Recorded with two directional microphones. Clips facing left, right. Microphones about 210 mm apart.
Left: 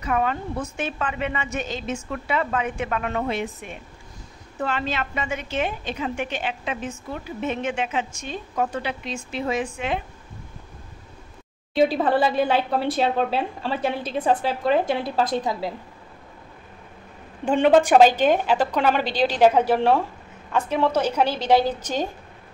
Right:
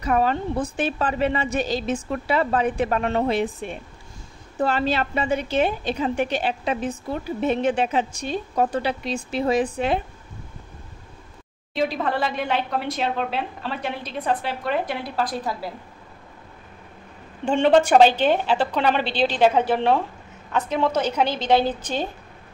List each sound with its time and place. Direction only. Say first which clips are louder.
0.0 s a woman's voice: right 3 dB; 35° right (ahead or behind)
11.9 s a woman's voice: left 4 dB; 30° left (ahead or behind)
17.5 s a woman's voice: even; 5° left (ahead or behind)